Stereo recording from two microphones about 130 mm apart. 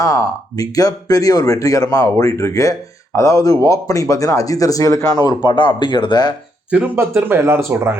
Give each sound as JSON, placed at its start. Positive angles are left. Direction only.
{"t": 0.0, "sound": "speech", "side_deg": 25}
{"t": 6.7, "sound": "speech", "side_deg": -10}